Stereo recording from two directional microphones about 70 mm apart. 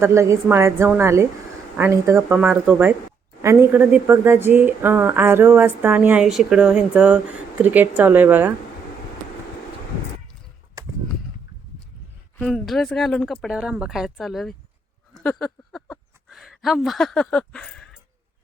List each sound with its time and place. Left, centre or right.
0.0 s speech: right
2.5 s speech: right
3.4 s speech: right
3.7 s speech: right
6.2 s speech: centre; by 8.5 s right
10.8 s a sound: right
12.5 s speech: centre
13.5 s speech: centre
15.4 s a sound: centre